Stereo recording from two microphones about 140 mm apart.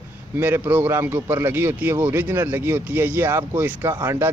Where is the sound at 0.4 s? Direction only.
15° right (ahead or behind).